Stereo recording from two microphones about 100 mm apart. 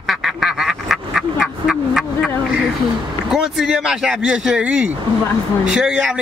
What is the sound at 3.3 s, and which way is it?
Speech, 5° right (ahead or behind).